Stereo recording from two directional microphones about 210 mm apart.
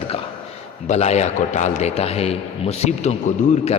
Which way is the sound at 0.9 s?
30° left (ahead or behind).